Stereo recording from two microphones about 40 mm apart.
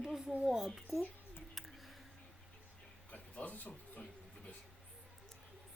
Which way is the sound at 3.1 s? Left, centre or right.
Left.